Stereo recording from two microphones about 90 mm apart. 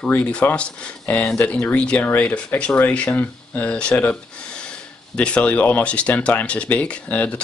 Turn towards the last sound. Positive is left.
turn(degrees=15)  # may be behind; listen again after turning